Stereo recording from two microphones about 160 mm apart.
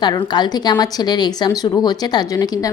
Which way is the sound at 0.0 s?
25° left (ahead or behind).